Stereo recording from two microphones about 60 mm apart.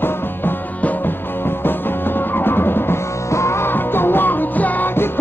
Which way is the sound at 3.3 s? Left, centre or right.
Left.